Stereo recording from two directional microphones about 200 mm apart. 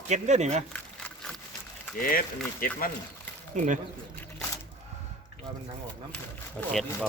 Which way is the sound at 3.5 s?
40° right (ahead or behind).